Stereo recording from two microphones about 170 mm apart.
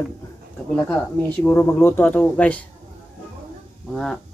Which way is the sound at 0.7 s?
10° left (ahead or behind).